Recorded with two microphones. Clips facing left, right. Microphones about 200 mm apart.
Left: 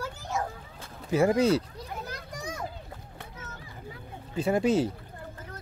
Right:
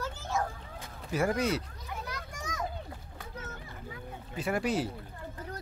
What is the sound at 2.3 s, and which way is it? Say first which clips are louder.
Children playing: left 6 dB; 30° left (ahead or behind).